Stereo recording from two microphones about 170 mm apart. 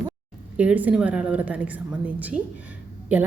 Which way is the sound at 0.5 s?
10° right (ahead or behind).